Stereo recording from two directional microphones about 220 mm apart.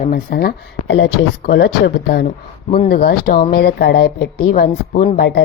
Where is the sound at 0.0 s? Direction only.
45° left (ahead or behind).